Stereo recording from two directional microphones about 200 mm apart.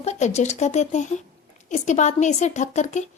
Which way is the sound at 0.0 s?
35° left (ahead or behind).